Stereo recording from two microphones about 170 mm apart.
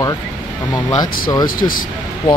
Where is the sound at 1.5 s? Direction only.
55° left (ahead or behind).